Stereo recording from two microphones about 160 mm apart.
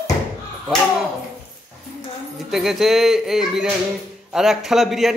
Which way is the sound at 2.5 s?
Centre (ahead or behind).